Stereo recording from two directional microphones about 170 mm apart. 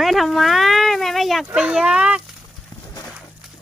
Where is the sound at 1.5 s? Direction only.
5° right (ahead or behind).